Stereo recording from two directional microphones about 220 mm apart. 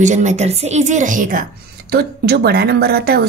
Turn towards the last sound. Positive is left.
turn(degrees=-45)  # may be behind; listen again after turning